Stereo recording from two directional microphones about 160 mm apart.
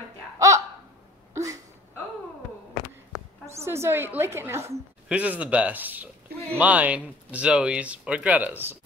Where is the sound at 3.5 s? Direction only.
15° right (ahead or behind).